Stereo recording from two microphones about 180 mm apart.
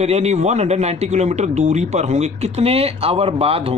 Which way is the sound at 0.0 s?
35° right (ahead or behind).